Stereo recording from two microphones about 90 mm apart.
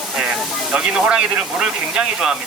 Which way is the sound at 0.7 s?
10° right (ahead or behind).